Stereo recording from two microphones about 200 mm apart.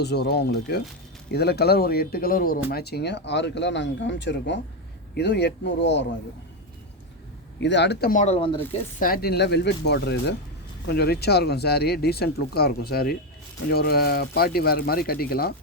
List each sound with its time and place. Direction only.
0.0 s speech: 55° left (ahead or behind)
7.6 s speech: 60° left (ahead or behind)
8.1 s speech: 35° left (ahead or behind)
9.0 s speech: 45° left (ahead or behind)